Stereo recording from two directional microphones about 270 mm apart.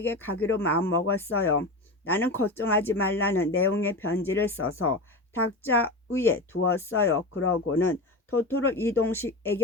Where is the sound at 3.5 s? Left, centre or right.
Left.